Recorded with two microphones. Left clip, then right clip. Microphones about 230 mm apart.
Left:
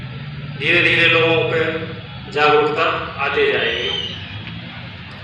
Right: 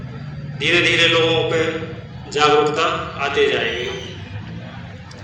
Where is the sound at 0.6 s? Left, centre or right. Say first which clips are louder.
Left 1 dB; right.